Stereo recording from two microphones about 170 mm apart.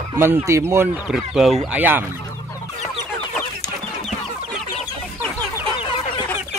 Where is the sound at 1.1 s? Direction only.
Centre (ahead or behind).